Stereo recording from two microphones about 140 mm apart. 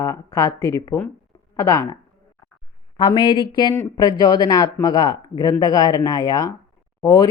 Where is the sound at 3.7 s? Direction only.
20° left (ahead or behind).